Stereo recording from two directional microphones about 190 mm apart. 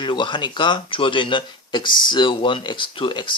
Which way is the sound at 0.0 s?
25° left (ahead or behind).